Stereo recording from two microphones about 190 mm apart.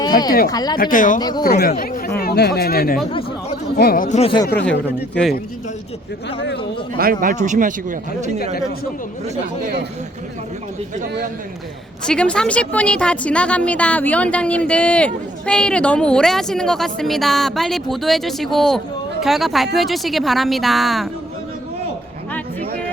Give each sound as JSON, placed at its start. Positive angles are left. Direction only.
{"t": 0.4, "sound": "speech", "side_deg": 20}
{"t": 0.8, "sound": "speech", "side_deg": 45}
{"t": 1.2, "sound": "speech", "side_deg": 20}
{"t": 1.5, "sound": "speech", "side_deg": 55}
{"t": 4.2, "sound": "speech", "side_deg": 25}
{"t": 4.5, "sound": "speech", "side_deg": 5}
{"t": 6.9, "sound": "speech", "side_deg": -50}
{"t": 12.0, "sound": "a woman's voice", "side_deg": 5}